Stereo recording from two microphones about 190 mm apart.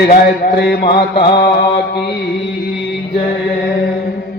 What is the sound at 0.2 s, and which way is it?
A man's voice, 55° left (ahead or behind).